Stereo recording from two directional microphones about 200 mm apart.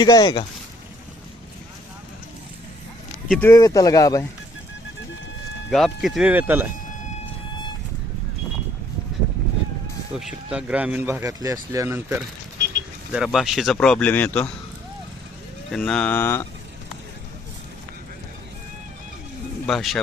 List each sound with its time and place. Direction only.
0.0 s speech: 20° left (ahead or behind)
3.2 s speech: 5° left (ahead or behind)
3.5 s speech: 15° left (ahead or behind)
5.7 s speech: centre (ahead or behind)
10.2 s speech: 5° right (ahead or behind)
13.1 s speech: centre (ahead or behind)
15.7 s speech: 5° left (ahead or behind)
19.6 s speech: centre (ahead or behind)